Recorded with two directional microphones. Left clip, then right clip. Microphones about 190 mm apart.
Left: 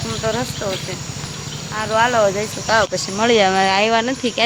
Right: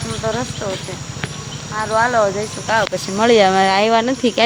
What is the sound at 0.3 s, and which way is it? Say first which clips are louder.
Speech: even; 10° left (ahead or behind).